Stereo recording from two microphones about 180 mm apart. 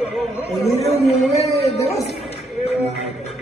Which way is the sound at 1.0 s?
35° left (ahead or behind).